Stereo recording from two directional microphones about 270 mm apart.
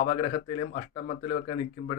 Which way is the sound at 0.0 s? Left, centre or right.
Left.